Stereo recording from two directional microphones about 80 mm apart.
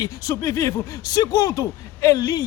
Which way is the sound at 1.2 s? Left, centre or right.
Left.